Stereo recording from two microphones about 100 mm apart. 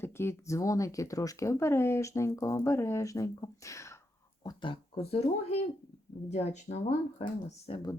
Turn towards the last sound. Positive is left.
turn(degrees=70)  # may be behind; listen again after turning